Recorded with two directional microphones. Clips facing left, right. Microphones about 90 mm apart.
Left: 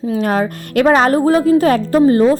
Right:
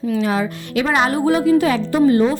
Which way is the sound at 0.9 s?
40° left (ahead or behind).